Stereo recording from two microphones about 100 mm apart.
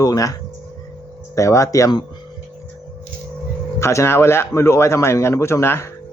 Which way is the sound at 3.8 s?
30° left (ahead or behind).